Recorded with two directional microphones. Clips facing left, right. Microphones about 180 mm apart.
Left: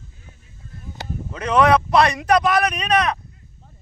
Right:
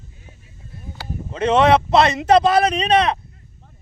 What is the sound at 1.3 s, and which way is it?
A man's voice, 25° right (ahead or behind).